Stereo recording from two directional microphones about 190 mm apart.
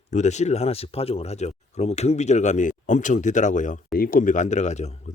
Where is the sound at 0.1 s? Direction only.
40° left (ahead or behind).